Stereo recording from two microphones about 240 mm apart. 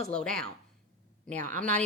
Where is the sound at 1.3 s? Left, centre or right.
Right.